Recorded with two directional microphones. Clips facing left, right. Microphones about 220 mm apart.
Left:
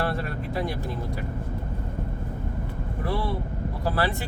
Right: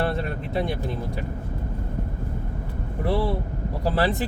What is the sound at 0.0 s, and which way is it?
Vehicle, 25° right (ahead or behind).